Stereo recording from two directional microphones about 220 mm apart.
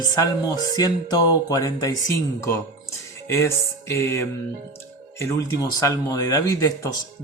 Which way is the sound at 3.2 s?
10° left (ahead or behind).